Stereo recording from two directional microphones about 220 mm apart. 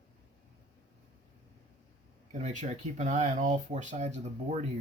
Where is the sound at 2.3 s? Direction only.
30° right (ahead or behind).